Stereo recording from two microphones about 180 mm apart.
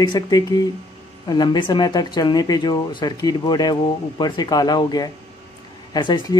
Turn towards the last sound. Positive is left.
turn(degrees=25)  # may be behind; listen again after turning